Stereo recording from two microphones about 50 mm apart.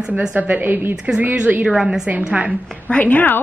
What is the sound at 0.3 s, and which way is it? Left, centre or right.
Speech, right.